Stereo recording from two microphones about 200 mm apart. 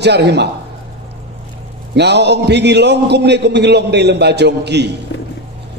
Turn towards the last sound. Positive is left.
turn(degrees=-55)  # may be behind; listen again after turning